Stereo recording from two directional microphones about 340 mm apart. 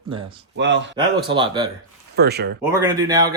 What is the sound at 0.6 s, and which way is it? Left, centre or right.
Speech, right.